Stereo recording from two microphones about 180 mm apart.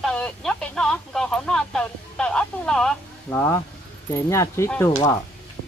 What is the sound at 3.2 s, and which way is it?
Speech, 15° left (ahead or behind).